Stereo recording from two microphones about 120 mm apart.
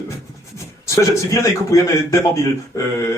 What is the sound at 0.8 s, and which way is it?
A man's voice, 25° left (ahead or behind).